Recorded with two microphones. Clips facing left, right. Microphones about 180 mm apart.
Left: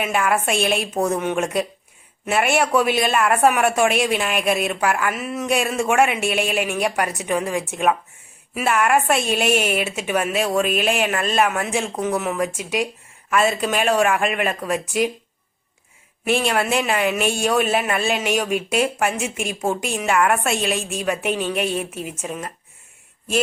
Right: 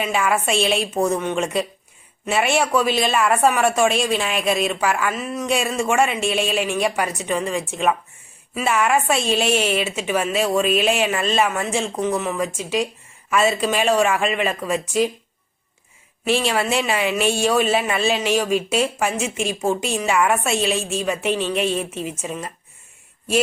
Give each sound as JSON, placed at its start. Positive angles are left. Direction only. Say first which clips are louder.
{"t": 0.0, "sound": "a woman's voice", "louder": "even", "side_deg": 0}
{"t": 16.2, "sound": "a woman's voice", "louder": "even", "side_deg": 0}